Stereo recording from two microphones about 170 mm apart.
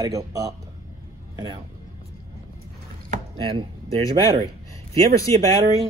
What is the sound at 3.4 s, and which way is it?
Speech, 30° right (ahead or behind).